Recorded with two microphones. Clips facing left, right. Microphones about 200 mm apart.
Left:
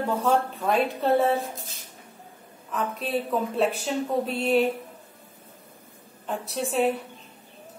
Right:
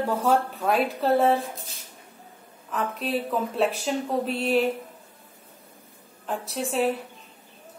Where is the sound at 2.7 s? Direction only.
Centre (ahead or behind).